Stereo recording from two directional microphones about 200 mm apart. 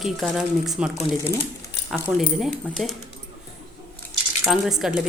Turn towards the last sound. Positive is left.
turn(degrees=0)  # may be behind; listen again after turning